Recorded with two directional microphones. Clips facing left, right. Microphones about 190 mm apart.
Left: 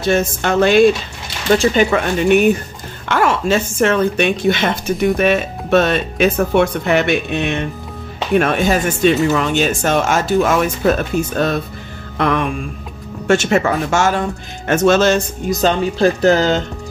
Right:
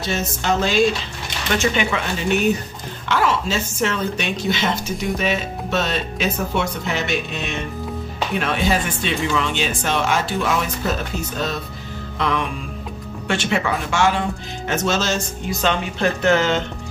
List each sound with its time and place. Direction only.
0.0 s speech: 55° left (ahead or behind)
1.5 s speech: 35° left (ahead or behind)
1.9 s speech: 55° left (ahead or behind)
8.4 s speech: 50° left (ahead or behind)
13.3 s speech: 45° left (ahead or behind)
15.5 s speech: 40° left (ahead or behind)